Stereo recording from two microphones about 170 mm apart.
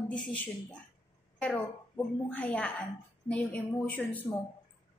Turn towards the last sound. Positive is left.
turn(degrees=10)  # may be behind; listen again after turning